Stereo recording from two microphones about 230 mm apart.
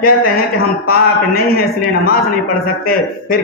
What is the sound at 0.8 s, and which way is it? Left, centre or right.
A man's voice, left.